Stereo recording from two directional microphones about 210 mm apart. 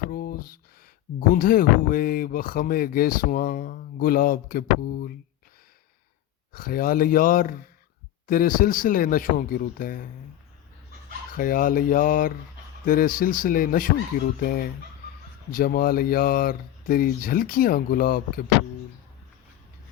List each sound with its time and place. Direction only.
0.1 s a sound: 45° left (ahead or behind)
1.3 s speech: 45° left (ahead or behind)
6.5 s speech: 45° left (ahead or behind)
11.3 s speech: 45° left (ahead or behind)